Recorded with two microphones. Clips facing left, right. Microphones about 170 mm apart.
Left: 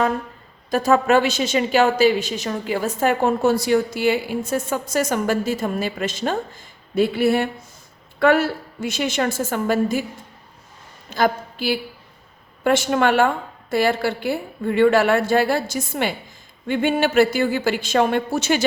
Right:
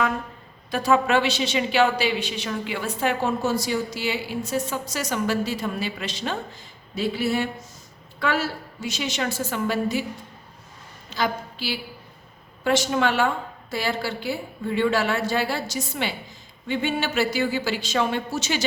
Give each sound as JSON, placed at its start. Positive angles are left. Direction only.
{"t": 0.7, "sound": "a woman's voice", "side_deg": 45}
{"t": 11.1, "sound": "a woman's voice", "side_deg": 50}